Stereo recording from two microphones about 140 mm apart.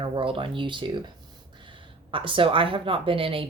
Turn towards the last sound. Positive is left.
turn(degrees=-40)  # may be behind; listen again after turning